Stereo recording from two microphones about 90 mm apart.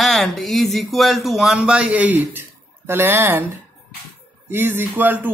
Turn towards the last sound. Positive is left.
turn(degrees=-20)  # may be behind; listen again after turning